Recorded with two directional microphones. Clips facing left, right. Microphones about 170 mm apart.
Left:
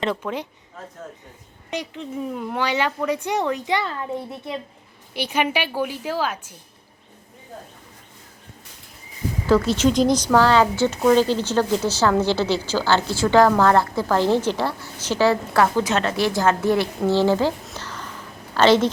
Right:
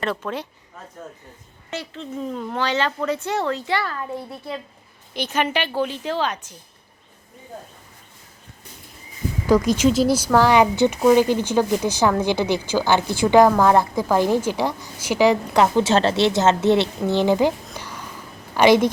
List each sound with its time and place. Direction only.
0.0 s speech: 15° left (ahead or behind)
1.7 s speech: 15° left (ahead or behind)
9.5 s a woman's voice: 15° right (ahead or behind)
17.7 s a sound: 10° right (ahead or behind)
18.5 s a woman's voice: 15° right (ahead or behind)